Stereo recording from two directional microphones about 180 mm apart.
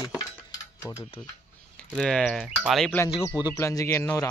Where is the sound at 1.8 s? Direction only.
5° left (ahead or behind).